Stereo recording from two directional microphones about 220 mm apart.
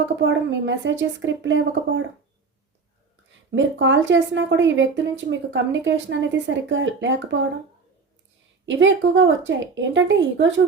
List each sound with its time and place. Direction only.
0.0 s speech: 55° right (ahead or behind)
3.5 s speech: 55° right (ahead or behind)
8.6 s speech: 60° right (ahead or behind)